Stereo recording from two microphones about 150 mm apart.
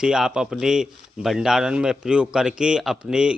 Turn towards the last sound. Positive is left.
turn(degrees=-5)  # may be behind; listen again after turning